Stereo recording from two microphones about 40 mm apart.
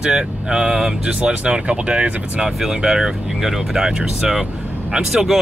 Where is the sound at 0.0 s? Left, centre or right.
Centre.